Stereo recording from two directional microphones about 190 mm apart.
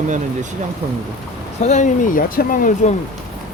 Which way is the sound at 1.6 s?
40° left (ahead or behind).